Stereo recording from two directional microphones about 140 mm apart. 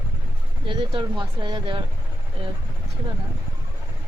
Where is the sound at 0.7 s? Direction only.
35° right (ahead or behind).